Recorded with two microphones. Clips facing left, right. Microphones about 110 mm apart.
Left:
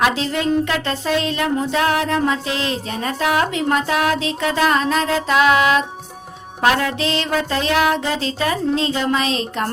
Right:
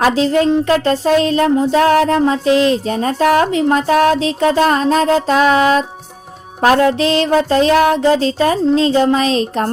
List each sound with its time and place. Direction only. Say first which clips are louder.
0.0 s music: right 6 dB; 35° right (ahead or behind)